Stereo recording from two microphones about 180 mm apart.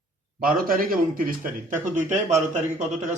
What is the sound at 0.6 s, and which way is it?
Speech, 55° right (ahead or behind).